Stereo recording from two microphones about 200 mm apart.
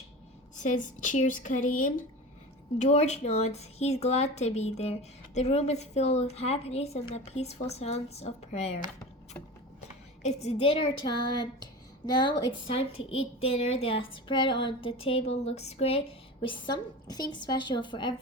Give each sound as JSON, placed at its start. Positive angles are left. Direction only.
{"t": 0.6, "sound": "a woman's voice", "side_deg": 40}
{"t": 9.8, "sound": "a woman's voice", "side_deg": 35}